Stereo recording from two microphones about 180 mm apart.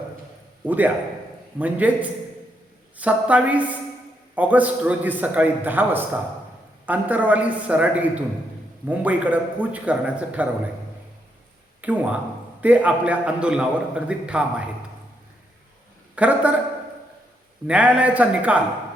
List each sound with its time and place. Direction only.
0.6 s a man's voice: 10° right (ahead or behind)
11.8 s a man's voice: 10° right (ahead or behind)
16.1 s a man's voice: 5° right (ahead or behind)
17.7 s a man's voice: 5° right (ahead or behind)